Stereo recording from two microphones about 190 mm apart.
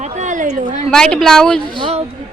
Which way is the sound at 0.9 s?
5° left (ahead or behind).